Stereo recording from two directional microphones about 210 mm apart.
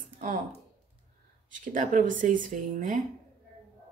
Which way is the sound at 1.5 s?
40° right (ahead or behind).